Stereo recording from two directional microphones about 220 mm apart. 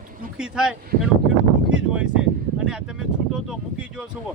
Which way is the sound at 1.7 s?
5° right (ahead or behind).